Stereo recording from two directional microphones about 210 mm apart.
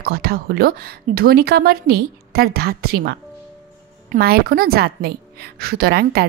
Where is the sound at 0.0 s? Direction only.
45° right (ahead or behind).